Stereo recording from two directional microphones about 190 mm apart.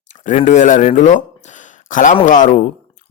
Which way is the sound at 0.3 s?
40° left (ahead or behind).